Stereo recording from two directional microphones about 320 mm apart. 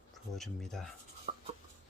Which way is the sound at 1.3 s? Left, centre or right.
Centre.